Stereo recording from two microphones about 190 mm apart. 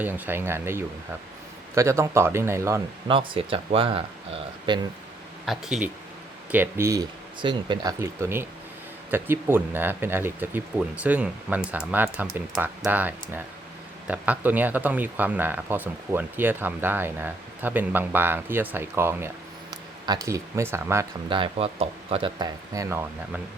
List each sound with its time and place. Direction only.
0.0 s speech: 10° right (ahead or behind)
3.1 s speech: 25° right (ahead or behind)
5.5 s speech: 5° right (ahead or behind)
21.2 s speech: 25° right (ahead or behind)